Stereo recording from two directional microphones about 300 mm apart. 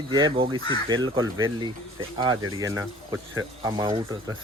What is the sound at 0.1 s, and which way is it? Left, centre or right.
Speech, centre.